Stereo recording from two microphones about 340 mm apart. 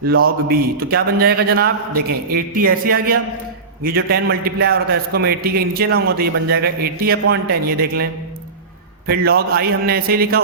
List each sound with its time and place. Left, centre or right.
0.1 s a man's voice: right
9.0 s a man's voice: right